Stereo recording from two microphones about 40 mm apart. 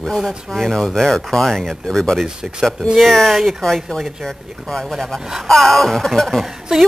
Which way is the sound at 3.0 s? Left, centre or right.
Centre.